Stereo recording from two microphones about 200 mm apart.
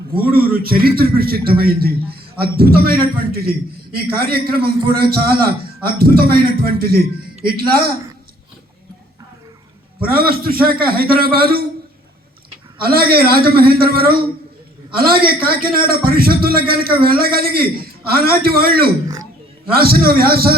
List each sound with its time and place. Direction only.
0.1 s a man's voice: 50° right (ahead or behind)
10.0 s a man's voice: 50° right (ahead or behind)
12.8 s a man's voice: 50° right (ahead or behind)